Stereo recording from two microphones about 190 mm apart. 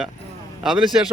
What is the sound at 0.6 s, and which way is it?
Speech, centre (ahead or behind).